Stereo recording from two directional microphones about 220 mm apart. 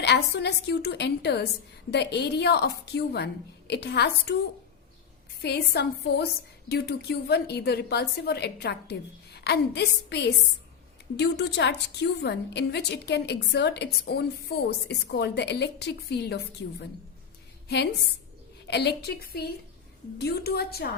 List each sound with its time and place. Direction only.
0.0 s a woman's voice: 50° left (ahead or behind)
5.4 s a woman's voice: 50° left (ahead or behind)
18.7 s a woman's voice: 50° left (ahead or behind)